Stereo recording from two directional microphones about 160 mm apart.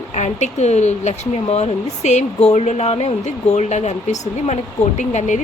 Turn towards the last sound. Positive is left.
turn(degrees=50)  # may be behind; listen again after turning